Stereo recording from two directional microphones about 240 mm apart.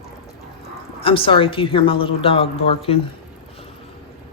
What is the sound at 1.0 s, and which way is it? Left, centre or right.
A man's voice, left.